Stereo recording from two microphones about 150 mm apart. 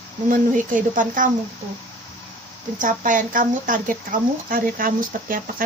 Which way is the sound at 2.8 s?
60° right (ahead or behind).